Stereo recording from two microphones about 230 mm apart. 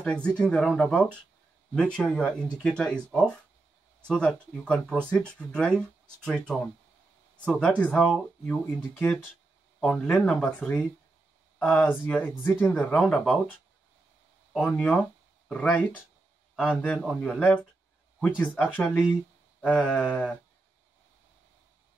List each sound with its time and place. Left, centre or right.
0.0 s speech: centre
9.8 s speech: centre
14.5 s speech: centre